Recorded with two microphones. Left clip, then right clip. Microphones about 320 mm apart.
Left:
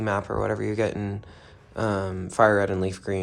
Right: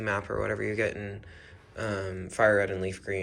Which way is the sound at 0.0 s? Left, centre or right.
Centre.